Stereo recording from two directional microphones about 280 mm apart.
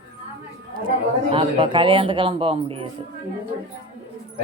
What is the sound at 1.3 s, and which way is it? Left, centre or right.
Speech, centre.